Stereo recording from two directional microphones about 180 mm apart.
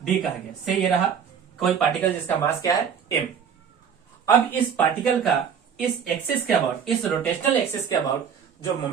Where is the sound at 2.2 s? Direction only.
15° left (ahead or behind).